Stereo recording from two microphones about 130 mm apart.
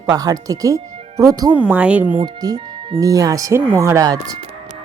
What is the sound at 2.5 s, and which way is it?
Music, 45° right (ahead or behind).